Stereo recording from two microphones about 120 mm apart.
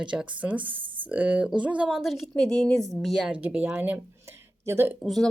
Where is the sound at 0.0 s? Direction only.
10° right (ahead or behind).